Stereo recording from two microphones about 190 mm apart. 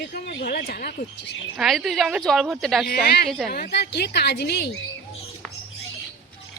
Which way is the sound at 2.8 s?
55° left (ahead or behind).